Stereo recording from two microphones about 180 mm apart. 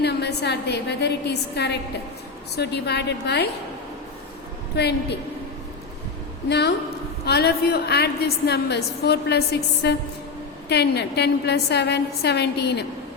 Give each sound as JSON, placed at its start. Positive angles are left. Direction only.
{"t": 0.0, "sound": "a woman's voice", "side_deg": 70}
{"t": 4.7, "sound": "a woman's voice", "side_deg": 65}
{"t": 6.5, "sound": "a woman's voice", "side_deg": 70}